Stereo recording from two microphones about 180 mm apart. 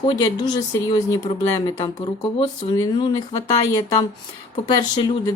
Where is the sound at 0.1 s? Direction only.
20° left (ahead or behind).